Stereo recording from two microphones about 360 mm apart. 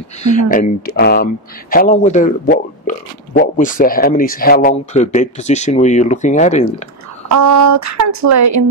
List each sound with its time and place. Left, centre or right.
0.2 s speech: left
7.2 s speech: right